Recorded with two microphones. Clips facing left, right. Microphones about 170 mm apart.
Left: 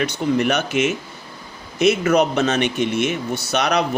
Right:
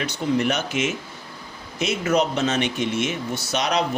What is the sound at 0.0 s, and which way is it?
Speech, 65° left (ahead or behind).